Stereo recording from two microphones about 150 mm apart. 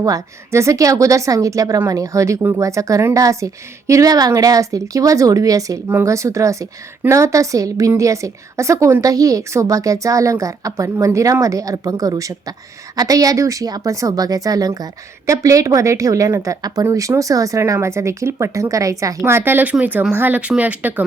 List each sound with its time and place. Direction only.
0.0 s a woman's voice: 20° right (ahead or behind)